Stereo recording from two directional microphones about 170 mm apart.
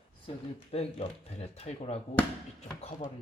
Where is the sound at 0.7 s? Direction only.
35° left (ahead or behind).